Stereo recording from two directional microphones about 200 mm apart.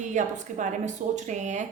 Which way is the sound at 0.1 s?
35° right (ahead or behind).